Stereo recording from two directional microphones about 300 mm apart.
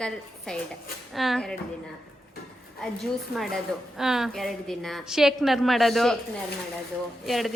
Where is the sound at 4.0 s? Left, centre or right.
Centre.